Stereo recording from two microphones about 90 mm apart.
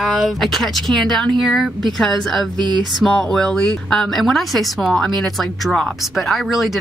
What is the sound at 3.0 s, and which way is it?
Speech, 5° left (ahead or behind).